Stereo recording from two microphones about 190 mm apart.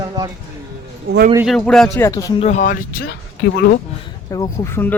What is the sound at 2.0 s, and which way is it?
Speech, 20° left (ahead or behind).